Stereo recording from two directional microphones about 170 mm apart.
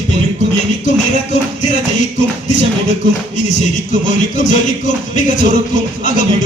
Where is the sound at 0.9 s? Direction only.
45° left (ahead or behind).